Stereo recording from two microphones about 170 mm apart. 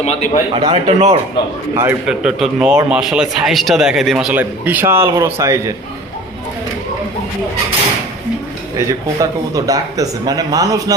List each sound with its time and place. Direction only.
0.0 s a man's voice: 40° left (ahead or behind)
0.5 s speech: 35° right (ahead or behind)
1.7 s a man's voice: 15° right (ahead or behind)
8.9 s speech: 20° right (ahead or behind)